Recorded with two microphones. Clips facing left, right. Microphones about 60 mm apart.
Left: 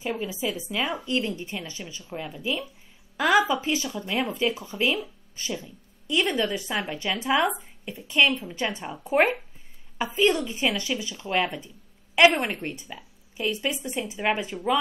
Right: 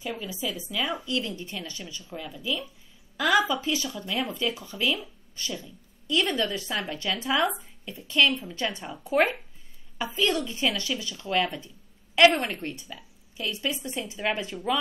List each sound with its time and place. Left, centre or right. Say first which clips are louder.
0.0 s a woman's voice: left 4 dB; left